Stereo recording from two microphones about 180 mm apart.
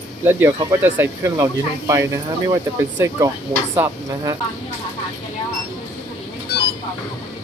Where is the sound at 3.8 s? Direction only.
20° right (ahead or behind).